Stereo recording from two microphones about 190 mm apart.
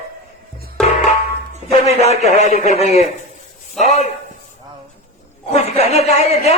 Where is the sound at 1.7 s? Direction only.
35° left (ahead or behind).